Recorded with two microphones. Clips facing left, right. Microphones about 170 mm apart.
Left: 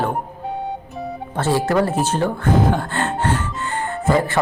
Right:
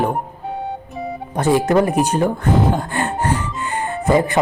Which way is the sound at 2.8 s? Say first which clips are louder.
Right 1 dB; 15° right (ahead or behind).